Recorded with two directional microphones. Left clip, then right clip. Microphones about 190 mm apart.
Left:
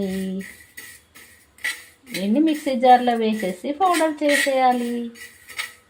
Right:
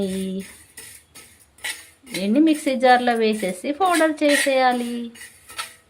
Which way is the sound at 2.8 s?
10° right (ahead or behind).